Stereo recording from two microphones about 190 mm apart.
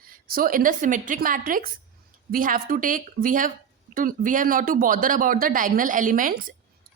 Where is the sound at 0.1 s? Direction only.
50° right (ahead or behind).